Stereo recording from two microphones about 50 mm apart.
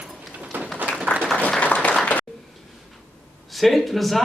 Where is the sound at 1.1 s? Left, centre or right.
Left.